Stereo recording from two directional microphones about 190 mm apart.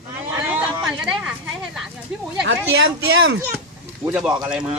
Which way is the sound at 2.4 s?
80° right.